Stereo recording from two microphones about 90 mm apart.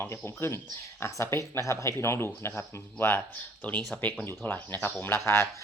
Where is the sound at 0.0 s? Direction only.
25° left (ahead or behind).